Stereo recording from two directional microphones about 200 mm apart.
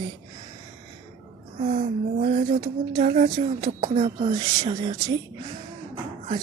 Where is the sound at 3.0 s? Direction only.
35° right (ahead or behind).